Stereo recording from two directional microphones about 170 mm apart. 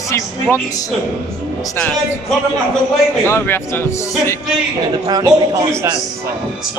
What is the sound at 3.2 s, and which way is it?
Speech, 15° left (ahead or behind).